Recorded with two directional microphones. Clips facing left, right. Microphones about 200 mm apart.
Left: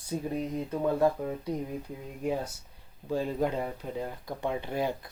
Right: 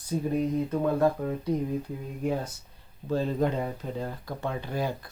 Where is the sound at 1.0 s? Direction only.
10° left (ahead or behind).